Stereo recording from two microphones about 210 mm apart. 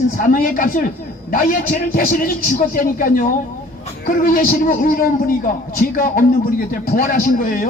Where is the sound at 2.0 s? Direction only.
45° left (ahead or behind).